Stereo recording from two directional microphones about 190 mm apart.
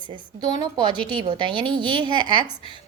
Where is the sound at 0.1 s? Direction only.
25° right (ahead or behind).